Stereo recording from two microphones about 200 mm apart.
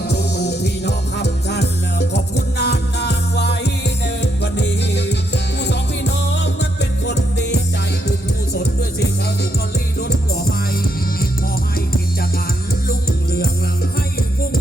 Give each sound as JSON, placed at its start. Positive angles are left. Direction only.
{"t": 0.1, "sound": "music", "side_deg": 55}